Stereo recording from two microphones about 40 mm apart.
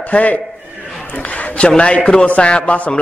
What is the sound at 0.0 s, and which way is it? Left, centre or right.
A man's voice, left.